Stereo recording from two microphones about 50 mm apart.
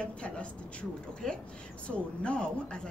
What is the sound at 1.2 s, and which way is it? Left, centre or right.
Speech, centre.